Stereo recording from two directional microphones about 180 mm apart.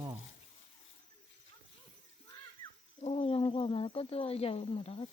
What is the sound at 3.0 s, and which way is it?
Speech, 35° left (ahead or behind).